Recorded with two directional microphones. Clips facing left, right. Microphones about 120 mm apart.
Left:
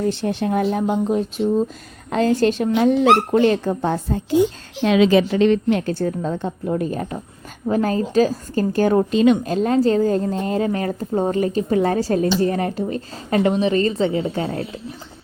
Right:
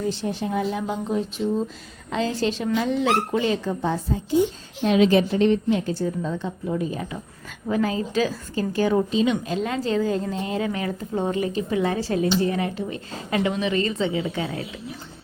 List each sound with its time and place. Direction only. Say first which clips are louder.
0.0 s a woman's voice: left 5 dB; 65° left (ahead or behind)
4.8 s a woman's voice: left 3 dB; 90° left; by 14.7 s 40° left (ahead or behind)